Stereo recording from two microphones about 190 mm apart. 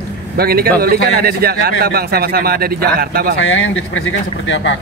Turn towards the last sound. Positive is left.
turn(degrees=75)  # may be behind; listen again after turning